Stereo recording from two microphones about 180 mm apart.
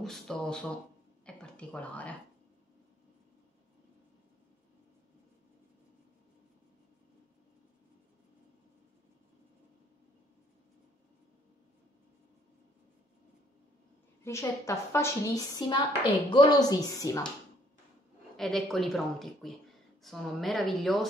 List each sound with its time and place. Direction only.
0.0 s speech: 5° left (ahead or behind)
1.2 s a sound: 5° left (ahead or behind)
14.2 s a woman's voice: 15° left (ahead or behind)
18.3 s speech: centre (ahead or behind)